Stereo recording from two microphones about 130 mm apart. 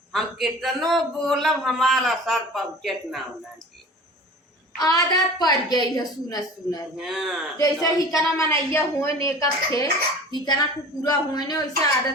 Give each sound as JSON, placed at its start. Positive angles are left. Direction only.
{"t": 0.1, "sound": "a man's voice", "side_deg": 0}
{"t": 4.8, "sound": "a woman's voice", "side_deg": 30}
{"t": 6.9, "sound": "a man's voice", "side_deg": 0}
{"t": 7.6, "sound": "a woman's voice", "side_deg": 25}